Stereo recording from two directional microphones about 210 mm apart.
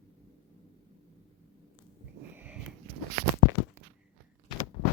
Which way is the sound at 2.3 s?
5° right (ahead or behind).